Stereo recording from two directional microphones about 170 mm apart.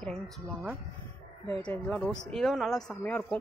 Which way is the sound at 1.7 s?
10° left (ahead or behind).